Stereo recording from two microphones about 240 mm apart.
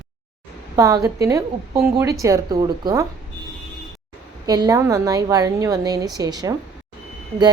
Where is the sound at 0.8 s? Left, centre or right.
Centre.